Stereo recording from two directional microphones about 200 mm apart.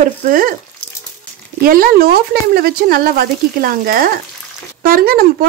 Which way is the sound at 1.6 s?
45° right (ahead or behind).